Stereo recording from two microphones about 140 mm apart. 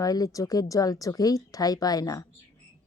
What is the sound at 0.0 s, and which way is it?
A woman's voice, 25° left (ahead or behind).